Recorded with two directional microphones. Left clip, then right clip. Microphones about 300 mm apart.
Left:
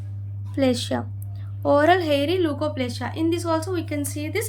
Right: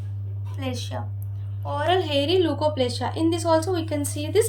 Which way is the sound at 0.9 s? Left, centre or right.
Left.